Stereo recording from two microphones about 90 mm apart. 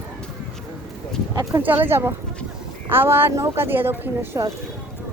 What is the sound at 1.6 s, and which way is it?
A woman's voice, 20° right (ahead or behind).